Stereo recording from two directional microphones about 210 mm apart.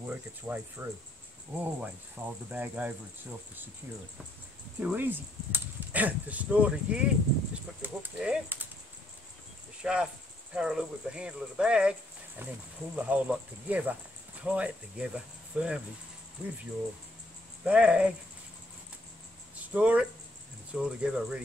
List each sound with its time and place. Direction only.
0.0 s speech: 10° right (ahead or behind)
4.7 s speech: 10° right (ahead or behind)
9.8 s speech: 5° right (ahead or behind)
17.6 s speech: 5° right (ahead or behind)
19.7 s speech: 5° right (ahead or behind)